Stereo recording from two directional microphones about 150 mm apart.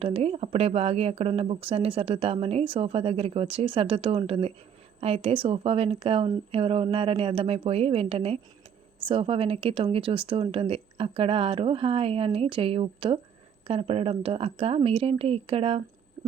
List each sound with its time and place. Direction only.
0.0 s speech: 40° right (ahead or behind)